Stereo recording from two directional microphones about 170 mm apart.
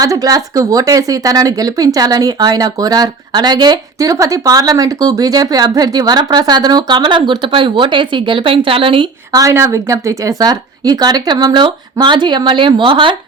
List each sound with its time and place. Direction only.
0.0 s speech: 20° right (ahead or behind)